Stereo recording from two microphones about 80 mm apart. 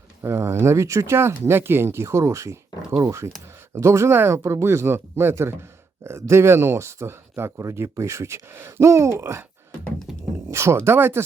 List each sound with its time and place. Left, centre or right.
0.2 s speech: right
10.1 s a sound: centre
10.5 s speech: right